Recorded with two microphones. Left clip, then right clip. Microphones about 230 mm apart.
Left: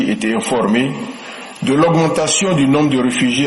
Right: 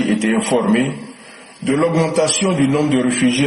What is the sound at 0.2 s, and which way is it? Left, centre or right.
Speech, left.